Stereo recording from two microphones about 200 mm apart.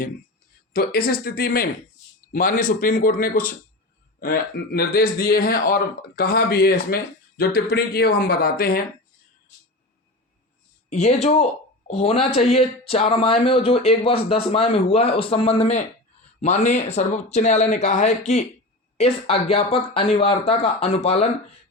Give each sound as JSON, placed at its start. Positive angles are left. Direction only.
{"t": 0.7, "sound": "speech", "side_deg": 50}
{"t": 10.8, "sound": "speech", "side_deg": 30}